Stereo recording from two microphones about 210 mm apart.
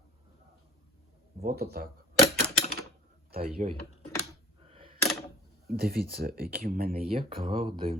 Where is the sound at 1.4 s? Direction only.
50° right (ahead or behind).